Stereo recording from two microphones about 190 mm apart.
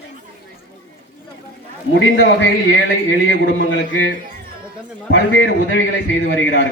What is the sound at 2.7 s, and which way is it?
Speech, 75° left (ahead or behind).